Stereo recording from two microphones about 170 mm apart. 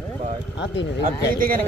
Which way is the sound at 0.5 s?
90° left.